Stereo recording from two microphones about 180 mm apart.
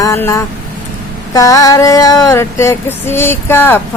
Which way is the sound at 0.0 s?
15° left (ahead or behind).